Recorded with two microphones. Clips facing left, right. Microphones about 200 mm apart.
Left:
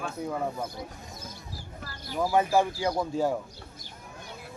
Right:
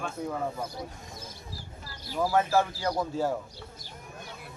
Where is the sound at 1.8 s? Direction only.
55° left (ahead or behind).